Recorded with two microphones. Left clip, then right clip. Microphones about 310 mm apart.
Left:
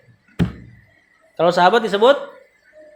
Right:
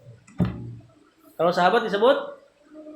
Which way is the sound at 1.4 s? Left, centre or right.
Left.